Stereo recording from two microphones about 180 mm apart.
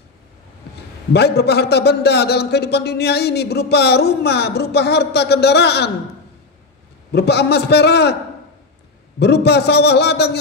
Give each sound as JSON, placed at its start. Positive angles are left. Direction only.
{"t": 1.1, "sound": "a man's voice", "side_deg": 65}
{"t": 7.1, "sound": "a man's voice", "side_deg": 65}
{"t": 9.2, "sound": "a man's voice", "side_deg": 65}